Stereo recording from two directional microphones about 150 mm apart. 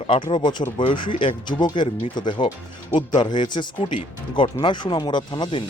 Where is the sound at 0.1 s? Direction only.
35° left (ahead or behind).